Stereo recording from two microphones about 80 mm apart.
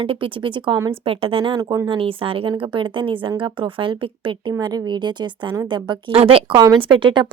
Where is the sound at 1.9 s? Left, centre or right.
Right.